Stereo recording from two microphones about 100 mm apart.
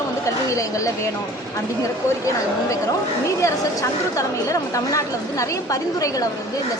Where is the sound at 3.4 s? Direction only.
35° left (ahead or behind).